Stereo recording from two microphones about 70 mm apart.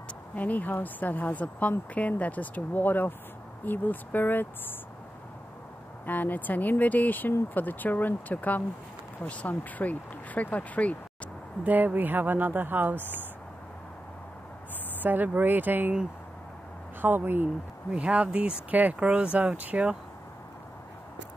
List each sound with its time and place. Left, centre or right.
0.4 s speech: left
6.0 s speech: left
11.6 s speech: right
15.0 s speech: right
17.0 s speech: right
17.9 s speech: centre